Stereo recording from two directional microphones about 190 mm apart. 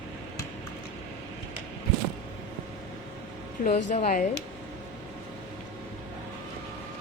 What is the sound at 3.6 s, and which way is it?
Speech, 35° left (ahead or behind).